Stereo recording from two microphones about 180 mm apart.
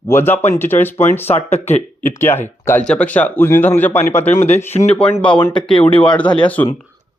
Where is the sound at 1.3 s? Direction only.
35° left (ahead or behind).